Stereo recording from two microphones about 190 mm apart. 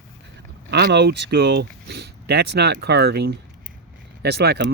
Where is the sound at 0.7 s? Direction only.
65° right (ahead or behind).